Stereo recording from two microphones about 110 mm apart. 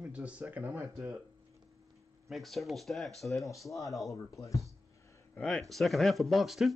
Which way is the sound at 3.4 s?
30° left (ahead or behind).